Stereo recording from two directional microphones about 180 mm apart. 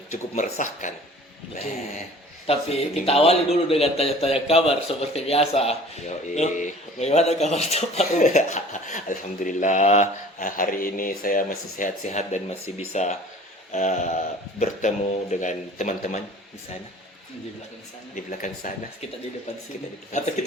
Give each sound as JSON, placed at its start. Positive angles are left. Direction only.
{"t": 0.1, "sound": "a man's voice", "side_deg": 40}
{"t": 18.1, "sound": "a man's voice", "side_deg": 45}
{"t": 20.1, "sound": "speech", "side_deg": 40}